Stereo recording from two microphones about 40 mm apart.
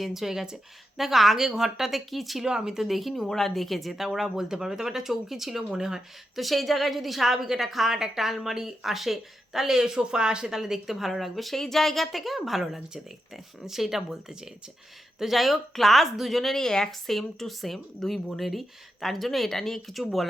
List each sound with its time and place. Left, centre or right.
0.0 s speech: centre
2.5 s a woman's voice: centre
2.9 s speech: centre
3.2 s a woman's voice: centre
6.4 s a woman's voice: centre; by 10.5 s right
10.5 s speech: centre
17.2 s speech: centre